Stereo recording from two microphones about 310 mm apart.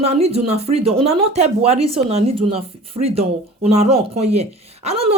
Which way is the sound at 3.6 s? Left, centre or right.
Centre.